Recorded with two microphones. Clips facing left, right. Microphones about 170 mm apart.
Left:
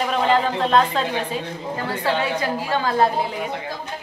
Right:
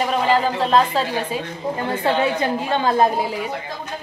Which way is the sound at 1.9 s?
25° right (ahead or behind).